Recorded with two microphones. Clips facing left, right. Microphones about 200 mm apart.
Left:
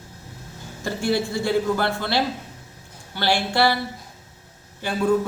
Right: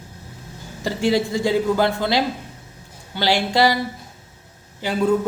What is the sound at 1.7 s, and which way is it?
Speech, 15° right (ahead or behind).